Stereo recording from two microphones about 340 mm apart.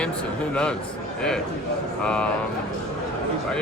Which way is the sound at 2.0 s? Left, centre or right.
Centre.